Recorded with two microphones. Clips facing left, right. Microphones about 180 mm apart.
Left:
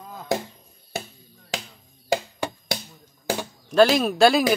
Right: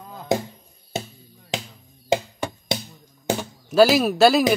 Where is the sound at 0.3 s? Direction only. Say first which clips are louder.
Right 3 dB; 20° right (ahead or behind).